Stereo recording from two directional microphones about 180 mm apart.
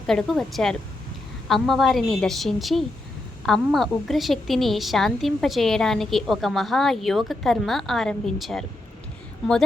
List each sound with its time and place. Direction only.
0.1 s a woman's voice: 5° left (ahead or behind)